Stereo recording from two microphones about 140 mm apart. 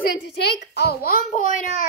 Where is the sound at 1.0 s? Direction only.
80° left.